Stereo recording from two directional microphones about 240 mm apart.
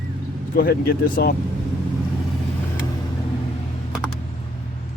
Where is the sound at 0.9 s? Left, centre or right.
Left.